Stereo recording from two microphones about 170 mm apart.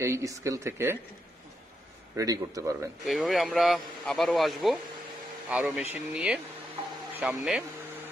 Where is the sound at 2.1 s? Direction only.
20° right (ahead or behind).